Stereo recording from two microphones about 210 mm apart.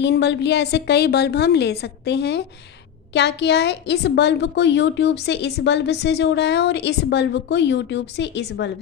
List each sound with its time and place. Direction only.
0.0 s a woman's voice: 55° left (ahead or behind)